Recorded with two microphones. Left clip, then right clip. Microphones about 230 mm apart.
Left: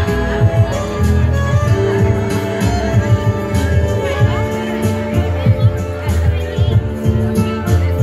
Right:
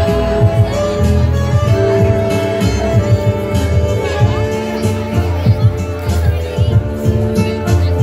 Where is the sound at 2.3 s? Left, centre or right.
Left.